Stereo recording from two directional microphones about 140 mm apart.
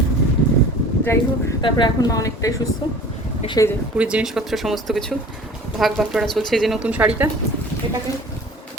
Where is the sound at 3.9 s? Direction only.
10° right (ahead or behind).